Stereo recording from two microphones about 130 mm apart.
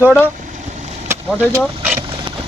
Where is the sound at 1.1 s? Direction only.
15° right (ahead or behind).